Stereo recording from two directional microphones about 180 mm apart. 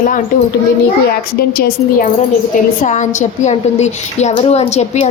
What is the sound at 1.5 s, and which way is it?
Speech, 60° left (ahead or behind).